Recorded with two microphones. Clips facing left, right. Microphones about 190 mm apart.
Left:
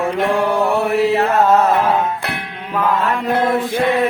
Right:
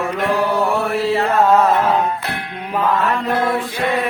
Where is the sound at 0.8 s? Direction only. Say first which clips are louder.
Left 3 dB; 20° left (ahead or behind).